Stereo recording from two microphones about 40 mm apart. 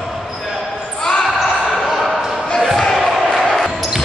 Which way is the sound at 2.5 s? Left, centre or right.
Centre.